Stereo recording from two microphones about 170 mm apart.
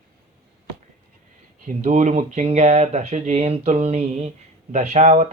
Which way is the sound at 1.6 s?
45° right (ahead or behind).